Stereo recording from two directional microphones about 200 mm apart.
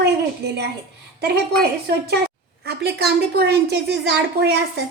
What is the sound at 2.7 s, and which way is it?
A woman's voice, 55° right (ahead or behind).